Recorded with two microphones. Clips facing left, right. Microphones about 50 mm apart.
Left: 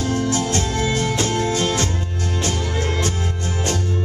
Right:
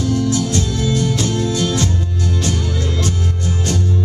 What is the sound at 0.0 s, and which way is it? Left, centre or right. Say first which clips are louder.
Music: right 3 dB; left.